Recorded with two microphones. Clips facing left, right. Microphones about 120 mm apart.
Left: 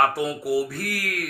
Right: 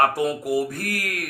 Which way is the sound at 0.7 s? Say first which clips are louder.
Right 1 dB; 50° right (ahead or behind).